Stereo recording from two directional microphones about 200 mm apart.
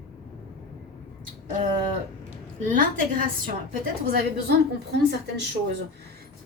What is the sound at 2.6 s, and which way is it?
Speech, 40° right (ahead or behind).